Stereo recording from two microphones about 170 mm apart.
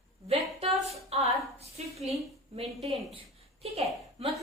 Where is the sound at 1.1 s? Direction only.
40° right (ahead or behind).